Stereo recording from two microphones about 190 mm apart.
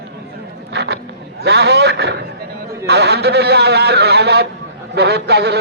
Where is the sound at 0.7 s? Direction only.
60° right (ahead or behind).